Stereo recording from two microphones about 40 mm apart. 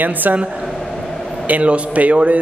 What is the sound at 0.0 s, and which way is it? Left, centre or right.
Speech, right.